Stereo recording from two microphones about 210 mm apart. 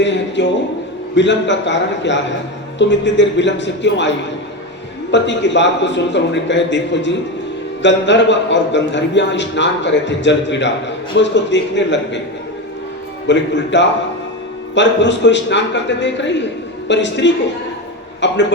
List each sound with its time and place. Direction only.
0.0 s a man's voice: 60° left (ahead or behind)
5.1 s a man's voice: 60° left (ahead or behind)
13.2 s a man's voice: 60° left (ahead or behind)